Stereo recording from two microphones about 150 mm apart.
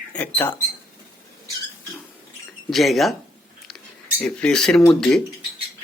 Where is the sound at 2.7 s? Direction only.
Centre (ahead or behind).